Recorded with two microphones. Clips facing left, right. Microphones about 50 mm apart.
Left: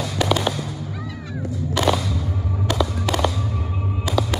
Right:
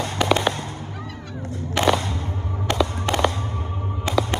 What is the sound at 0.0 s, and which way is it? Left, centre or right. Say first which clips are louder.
Fireworks: right 1 dB; right.